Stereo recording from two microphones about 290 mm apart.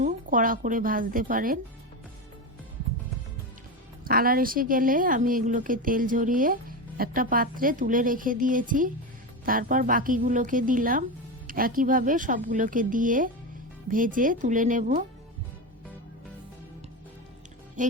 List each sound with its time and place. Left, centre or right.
0.0 s speech: right
4.0 s a woman's voice: right
17.8 s speech: right